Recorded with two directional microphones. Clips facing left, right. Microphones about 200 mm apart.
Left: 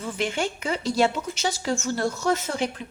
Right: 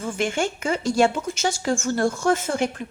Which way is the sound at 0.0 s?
45° right (ahead or behind).